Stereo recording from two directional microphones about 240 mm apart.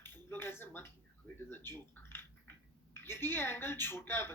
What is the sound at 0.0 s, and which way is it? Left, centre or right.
A woman's voice, centre.